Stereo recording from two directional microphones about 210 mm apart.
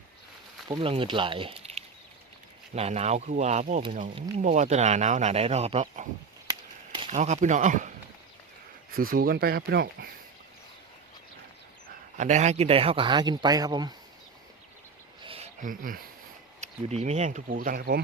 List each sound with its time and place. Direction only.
0.7 s speech: 25° right (ahead or behind)
7.1 s speech: 35° right (ahead or behind)
9.0 s speech: 45° right (ahead or behind)
12.1 s speech: 35° right (ahead or behind); by 13.9 s 20° right (ahead or behind)
15.2 s a sound: 25° right (ahead or behind)
15.6 s speech: 40° right (ahead or behind)